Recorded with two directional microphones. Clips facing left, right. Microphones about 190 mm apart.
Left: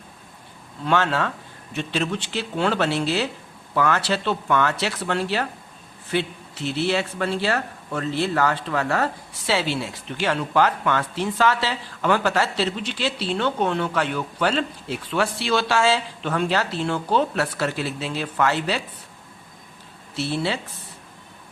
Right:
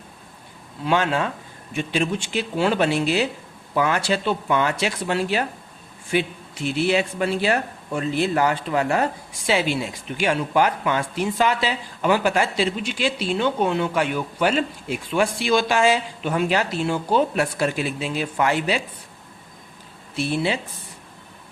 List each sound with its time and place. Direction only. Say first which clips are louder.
0.9 s speech: right 1 dB; 15° right (ahead or behind)
20.1 s speech: right 2 dB; 15° right (ahead or behind)